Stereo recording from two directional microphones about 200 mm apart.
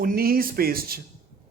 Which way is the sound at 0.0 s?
45° right (ahead or behind).